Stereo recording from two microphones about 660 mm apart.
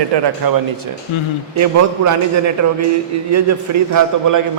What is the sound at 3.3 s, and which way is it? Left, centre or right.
A man's voice, right.